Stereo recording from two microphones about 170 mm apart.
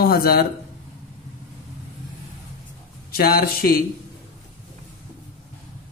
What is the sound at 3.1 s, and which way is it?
Speech, 65° left (ahead or behind).